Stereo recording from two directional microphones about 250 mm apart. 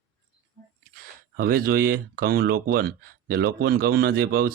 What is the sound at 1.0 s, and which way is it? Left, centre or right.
Speech, right.